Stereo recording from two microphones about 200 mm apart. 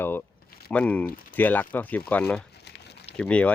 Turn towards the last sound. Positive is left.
turn(degrees=5)  # may be behind; listen again after turning